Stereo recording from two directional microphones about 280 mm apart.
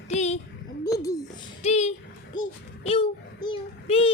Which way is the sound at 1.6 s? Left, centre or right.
Left.